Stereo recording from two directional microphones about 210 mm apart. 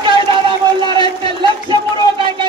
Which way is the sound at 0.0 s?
25° right (ahead or behind).